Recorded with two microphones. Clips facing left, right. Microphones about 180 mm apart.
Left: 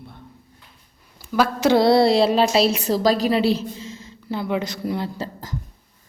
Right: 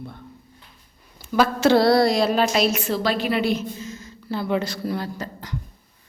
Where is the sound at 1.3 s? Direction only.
10° left (ahead or behind).